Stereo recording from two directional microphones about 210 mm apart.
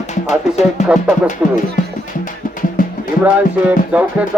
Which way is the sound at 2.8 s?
40° left (ahead or behind).